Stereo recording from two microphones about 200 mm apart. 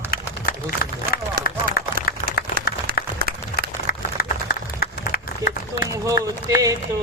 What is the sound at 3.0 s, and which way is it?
Applause, 50° left (ahead or behind).